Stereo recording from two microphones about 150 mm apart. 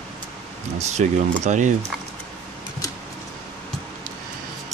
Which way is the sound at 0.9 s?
50° right (ahead or behind).